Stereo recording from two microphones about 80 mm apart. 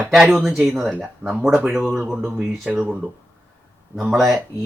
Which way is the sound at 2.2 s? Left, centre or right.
Centre.